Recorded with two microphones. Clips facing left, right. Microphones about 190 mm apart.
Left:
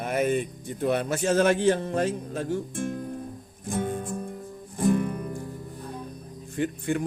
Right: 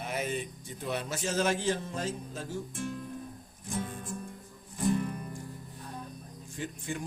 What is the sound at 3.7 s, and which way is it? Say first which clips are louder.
Music: left 8 dB; 55° left (ahead or behind).